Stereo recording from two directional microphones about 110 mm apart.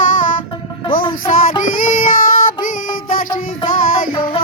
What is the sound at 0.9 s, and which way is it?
Music, 45° left (ahead or behind).